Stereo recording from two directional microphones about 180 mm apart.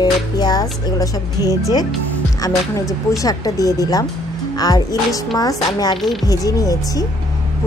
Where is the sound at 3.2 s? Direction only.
20° left (ahead or behind).